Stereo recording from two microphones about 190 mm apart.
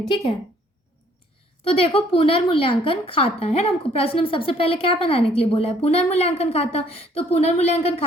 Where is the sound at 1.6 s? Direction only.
30° left (ahead or behind).